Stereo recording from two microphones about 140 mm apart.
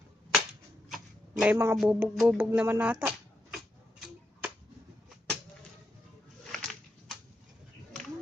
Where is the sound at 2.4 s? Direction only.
15° right (ahead or behind).